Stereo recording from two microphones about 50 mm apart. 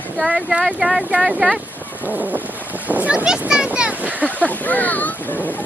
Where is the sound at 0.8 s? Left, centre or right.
Centre.